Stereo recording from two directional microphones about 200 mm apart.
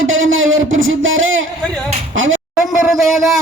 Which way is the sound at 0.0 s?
75° right (ahead or behind).